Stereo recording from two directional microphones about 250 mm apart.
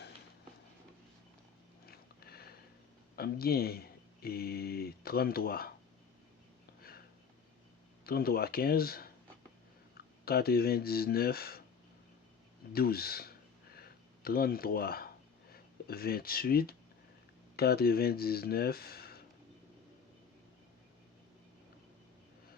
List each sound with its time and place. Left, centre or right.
1.9 s a sound: left
3.2 s speech: left
8.0 s speech: left
10.2 s speech: left
12.7 s speech: left
13.7 s a sound: left
15.9 s speech: left